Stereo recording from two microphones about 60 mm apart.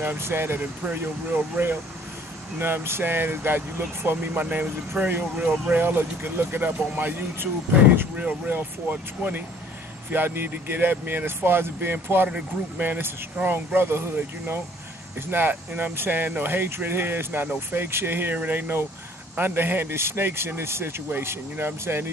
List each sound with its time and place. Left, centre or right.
0.2 s speech: right
4.3 s speech: right
10.1 s speech: right